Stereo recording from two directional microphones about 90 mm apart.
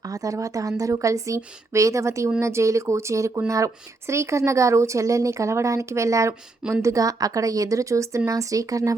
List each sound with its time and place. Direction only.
0.1 s speech: 40° right (ahead or behind)